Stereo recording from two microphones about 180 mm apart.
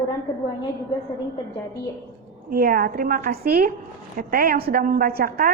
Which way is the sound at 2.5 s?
55° right (ahead or behind).